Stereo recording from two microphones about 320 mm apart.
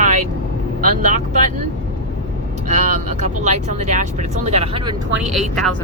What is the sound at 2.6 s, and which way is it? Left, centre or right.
Speech, right.